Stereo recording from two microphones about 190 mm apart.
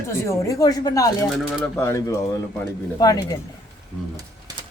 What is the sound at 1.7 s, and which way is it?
Speech, 15° left (ahead or behind).